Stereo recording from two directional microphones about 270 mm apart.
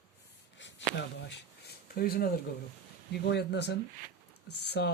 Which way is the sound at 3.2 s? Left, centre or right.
Left.